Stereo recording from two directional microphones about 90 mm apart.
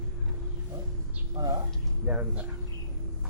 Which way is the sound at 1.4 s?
40° right (ahead or behind).